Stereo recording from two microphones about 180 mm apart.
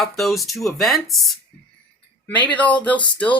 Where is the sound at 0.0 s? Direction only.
Centre (ahead or behind).